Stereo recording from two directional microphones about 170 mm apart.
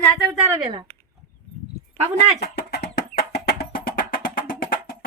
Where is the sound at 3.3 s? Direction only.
70° left (ahead or behind).